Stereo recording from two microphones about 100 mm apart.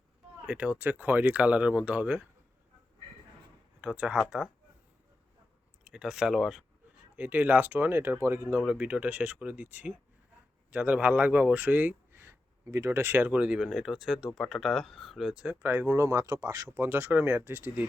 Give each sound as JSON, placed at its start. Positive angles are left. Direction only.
{"t": 0.4, "sound": "speech", "side_deg": -15}
{"t": 3.8, "sound": "speech", "side_deg": -10}
{"t": 5.8, "sound": "speech", "side_deg": -10}
{"t": 7.2, "sound": "speech", "side_deg": -15}
{"t": 15.4, "sound": "speech", "side_deg": -20}
{"t": 16.7, "sound": "speech", "side_deg": -25}